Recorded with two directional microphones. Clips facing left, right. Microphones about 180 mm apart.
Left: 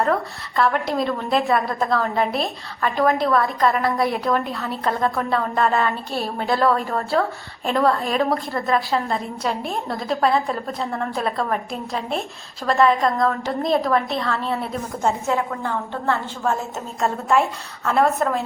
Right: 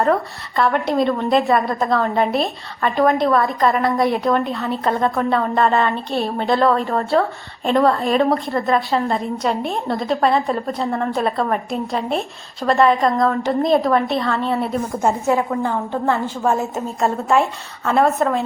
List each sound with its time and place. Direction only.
0.0 s a woman's voice: centre (ahead or behind); by 16.6 s 20° right (ahead or behind)
17.0 s a woman's voice: centre (ahead or behind)